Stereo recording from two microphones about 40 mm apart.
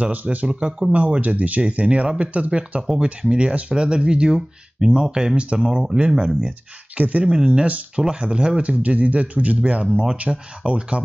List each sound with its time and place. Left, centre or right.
0.0 s speech: right
0.5 s speech: right
1.6 s speech: right
7.2 s speech: centre
7.6 s speech: right
8.1 s speech: right